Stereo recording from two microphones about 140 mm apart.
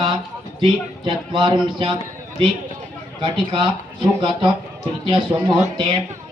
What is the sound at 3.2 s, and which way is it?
Speech, 35° right (ahead or behind).